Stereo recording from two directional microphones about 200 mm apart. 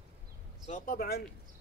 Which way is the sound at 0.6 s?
40° left (ahead or behind).